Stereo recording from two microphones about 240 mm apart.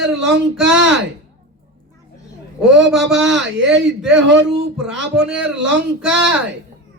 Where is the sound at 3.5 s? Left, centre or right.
Right.